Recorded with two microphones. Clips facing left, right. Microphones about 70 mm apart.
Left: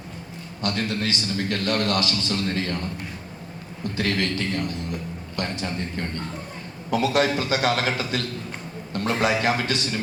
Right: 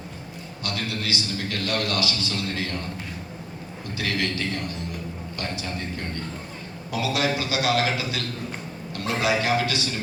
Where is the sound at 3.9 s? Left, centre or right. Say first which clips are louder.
Left 2 dB; left.